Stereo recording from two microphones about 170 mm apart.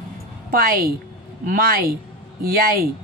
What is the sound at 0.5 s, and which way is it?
Speech, 60° right (ahead or behind).